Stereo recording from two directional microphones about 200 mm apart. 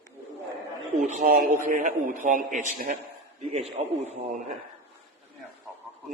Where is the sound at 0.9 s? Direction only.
35° right (ahead or behind).